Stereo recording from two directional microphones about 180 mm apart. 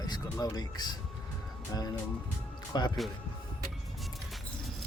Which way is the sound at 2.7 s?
25° left (ahead or behind).